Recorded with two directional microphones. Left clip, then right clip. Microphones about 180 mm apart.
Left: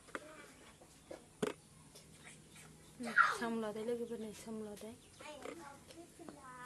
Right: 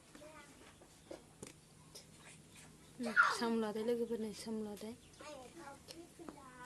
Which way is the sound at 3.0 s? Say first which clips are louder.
Even; 50° right (ahead or behind).